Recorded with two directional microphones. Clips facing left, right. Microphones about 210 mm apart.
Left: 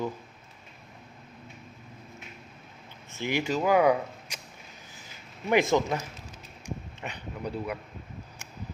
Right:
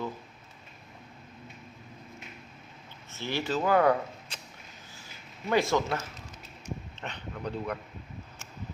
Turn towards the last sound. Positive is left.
turn(degrees=10)  # may be behind; listen again after turning